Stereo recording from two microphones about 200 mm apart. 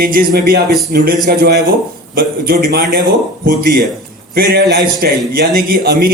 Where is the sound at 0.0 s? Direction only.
45° right (ahead or behind).